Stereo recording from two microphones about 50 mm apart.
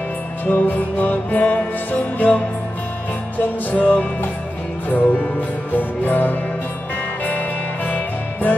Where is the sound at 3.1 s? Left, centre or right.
Left.